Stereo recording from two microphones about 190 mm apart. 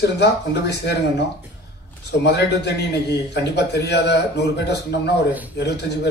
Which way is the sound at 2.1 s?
65° left (ahead or behind).